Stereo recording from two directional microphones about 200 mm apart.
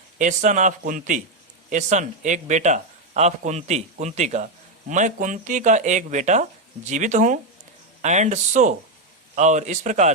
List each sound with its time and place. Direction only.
0.2 s speech: 40° right (ahead or behind)